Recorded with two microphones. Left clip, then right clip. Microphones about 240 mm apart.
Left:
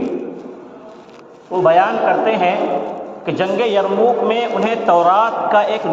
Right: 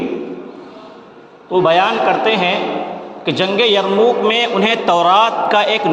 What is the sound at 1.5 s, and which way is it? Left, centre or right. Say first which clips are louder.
A man's voice: even; right.